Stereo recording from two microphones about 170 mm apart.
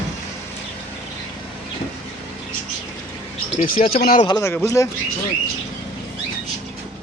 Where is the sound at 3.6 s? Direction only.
55° left (ahead or behind).